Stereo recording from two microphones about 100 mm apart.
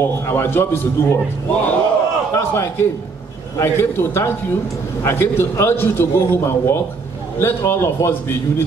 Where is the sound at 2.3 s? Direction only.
25° left (ahead or behind).